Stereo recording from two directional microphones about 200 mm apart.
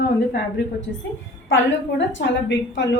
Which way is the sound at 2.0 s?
65° left (ahead or behind).